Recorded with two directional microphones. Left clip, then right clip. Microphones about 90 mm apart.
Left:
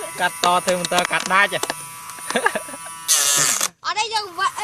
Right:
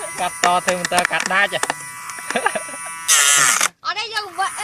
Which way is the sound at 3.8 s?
70° left (ahead or behind).